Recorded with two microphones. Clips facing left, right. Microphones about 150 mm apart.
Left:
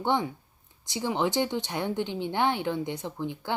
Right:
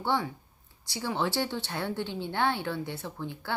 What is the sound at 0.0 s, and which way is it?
A woman's voice, 20° left (ahead or behind).